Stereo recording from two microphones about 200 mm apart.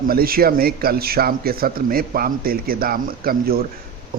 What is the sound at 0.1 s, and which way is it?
A man's voice, 50° right (ahead or behind).